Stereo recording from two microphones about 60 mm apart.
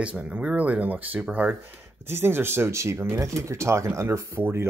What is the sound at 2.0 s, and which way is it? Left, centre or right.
Speech, right.